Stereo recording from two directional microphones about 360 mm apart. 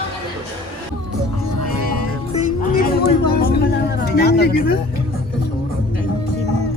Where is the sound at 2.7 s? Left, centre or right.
Left.